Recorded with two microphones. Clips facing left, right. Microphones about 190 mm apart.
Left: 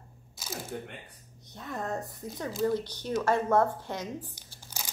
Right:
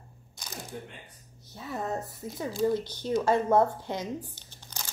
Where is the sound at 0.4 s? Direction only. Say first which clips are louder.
Left 5 dB; 5° left (ahead or behind).